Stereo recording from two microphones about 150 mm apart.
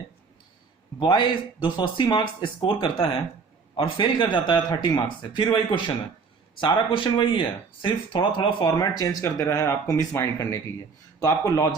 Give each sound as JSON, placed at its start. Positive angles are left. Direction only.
{"t": 0.9, "sound": "a man's voice", "side_deg": 30}